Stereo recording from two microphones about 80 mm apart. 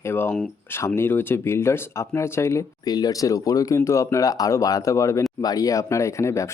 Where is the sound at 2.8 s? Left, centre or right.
Left.